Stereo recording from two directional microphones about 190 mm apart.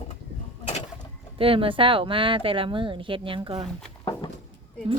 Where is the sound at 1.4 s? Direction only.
30° right (ahead or behind).